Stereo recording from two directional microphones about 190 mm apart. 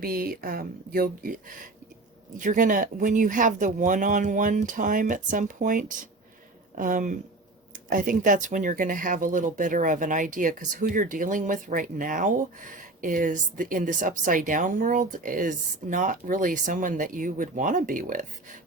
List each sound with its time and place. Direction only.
0.0 s speech: 50° right (ahead or behind)